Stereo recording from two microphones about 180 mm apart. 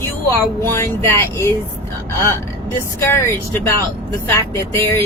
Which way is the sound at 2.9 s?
15° left (ahead or behind).